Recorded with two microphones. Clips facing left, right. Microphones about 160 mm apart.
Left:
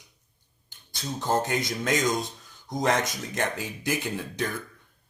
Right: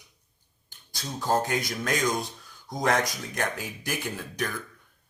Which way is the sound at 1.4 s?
20° left (ahead or behind).